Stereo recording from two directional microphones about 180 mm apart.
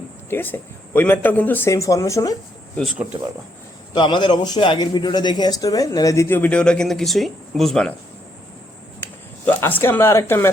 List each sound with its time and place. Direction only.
0.3 s speech: 10° left (ahead or behind)
3.9 s a man's voice: 25° left (ahead or behind); by 7.9 s 5° left (ahead or behind)
9.5 s speech: 10° left (ahead or behind)